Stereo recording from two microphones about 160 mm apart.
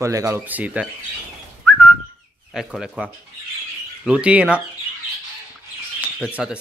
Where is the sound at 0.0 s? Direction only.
20° right (ahead or behind).